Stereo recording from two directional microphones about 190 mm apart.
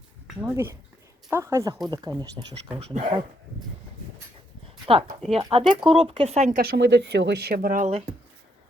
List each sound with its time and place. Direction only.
0.4 s a woman's voice: 15° right (ahead or behind)
2.7 s speech: 30° right (ahead or behind)
4.9 s speech: 30° right (ahead or behind)
6.6 s speech: 60° right (ahead or behind); by 8.0 s 40° right (ahead or behind)